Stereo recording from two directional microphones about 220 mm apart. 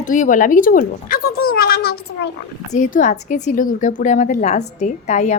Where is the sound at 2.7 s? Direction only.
35° left (ahead or behind).